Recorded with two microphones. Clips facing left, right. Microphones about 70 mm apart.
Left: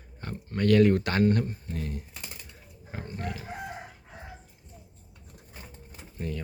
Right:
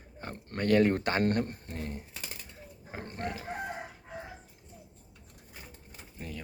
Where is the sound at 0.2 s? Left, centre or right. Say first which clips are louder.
Left 5 dB; right.